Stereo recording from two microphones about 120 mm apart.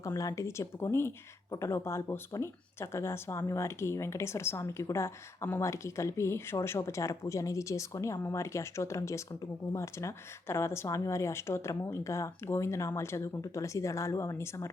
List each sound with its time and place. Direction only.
0.0 s speech: 30° left (ahead or behind)